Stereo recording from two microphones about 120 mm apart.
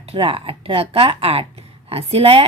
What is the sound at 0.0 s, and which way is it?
A woman's voice, 50° right (ahead or behind).